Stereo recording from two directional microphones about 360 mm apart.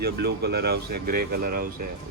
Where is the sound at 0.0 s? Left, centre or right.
Right.